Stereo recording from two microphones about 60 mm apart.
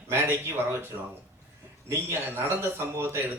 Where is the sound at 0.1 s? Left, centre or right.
Right.